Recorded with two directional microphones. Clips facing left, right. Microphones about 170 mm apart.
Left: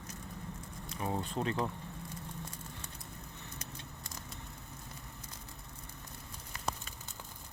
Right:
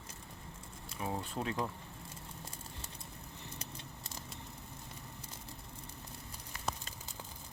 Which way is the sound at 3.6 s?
30° right (ahead or behind).